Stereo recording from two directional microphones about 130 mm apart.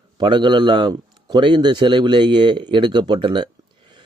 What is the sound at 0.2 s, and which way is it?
A man's voice, 35° right (ahead or behind).